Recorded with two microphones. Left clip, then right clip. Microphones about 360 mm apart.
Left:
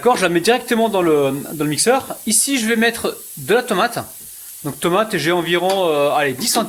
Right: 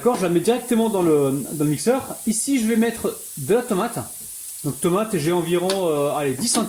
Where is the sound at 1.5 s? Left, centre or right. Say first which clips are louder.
Left 5 dB; left.